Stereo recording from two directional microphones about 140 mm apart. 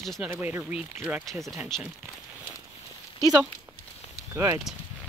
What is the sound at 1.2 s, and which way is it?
Speech, centre (ahead or behind).